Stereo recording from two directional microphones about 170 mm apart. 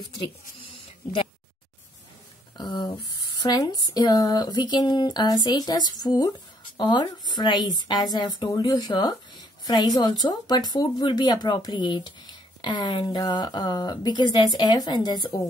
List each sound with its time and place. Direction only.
2.5 s speech: 25° left (ahead or behind)